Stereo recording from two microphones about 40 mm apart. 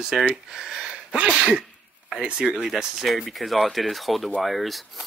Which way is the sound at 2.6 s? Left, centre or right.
Centre.